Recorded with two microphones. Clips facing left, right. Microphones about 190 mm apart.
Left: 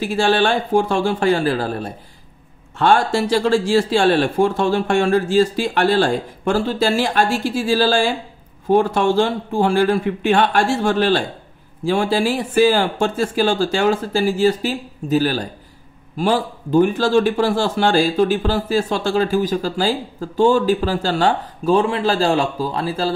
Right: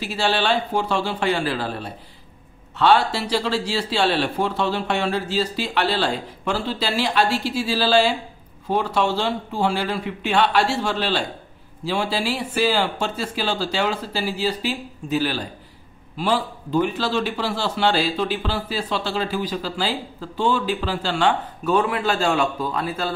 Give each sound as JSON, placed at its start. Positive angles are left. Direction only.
{"t": 0.0, "sound": "a man's voice", "side_deg": 50}